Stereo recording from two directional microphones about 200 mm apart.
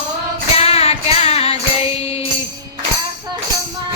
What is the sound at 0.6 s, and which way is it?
Music, 30° left (ahead or behind).